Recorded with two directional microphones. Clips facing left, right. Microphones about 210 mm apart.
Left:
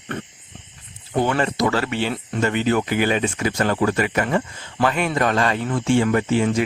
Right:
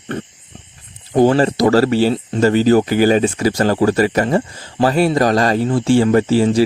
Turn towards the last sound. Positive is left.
turn(degrees=-35)  # may be behind; listen again after turning